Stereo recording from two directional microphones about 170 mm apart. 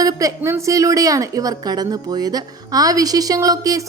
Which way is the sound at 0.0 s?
20° right (ahead or behind).